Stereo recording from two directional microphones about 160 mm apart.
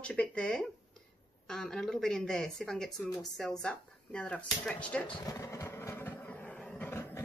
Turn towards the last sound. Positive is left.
turn(degrees=15)  # may be behind; listen again after turning